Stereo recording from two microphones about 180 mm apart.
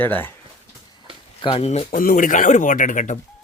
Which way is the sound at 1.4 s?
25° left (ahead or behind).